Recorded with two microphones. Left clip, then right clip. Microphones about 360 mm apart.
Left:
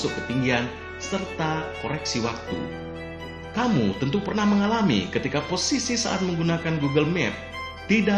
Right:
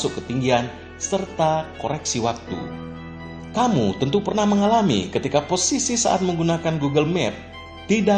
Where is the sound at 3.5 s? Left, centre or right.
Right.